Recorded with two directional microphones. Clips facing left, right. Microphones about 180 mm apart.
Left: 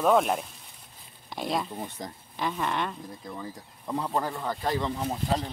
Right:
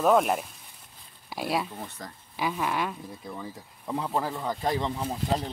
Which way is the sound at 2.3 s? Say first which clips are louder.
Right 1 dB; 5° right (ahead or behind).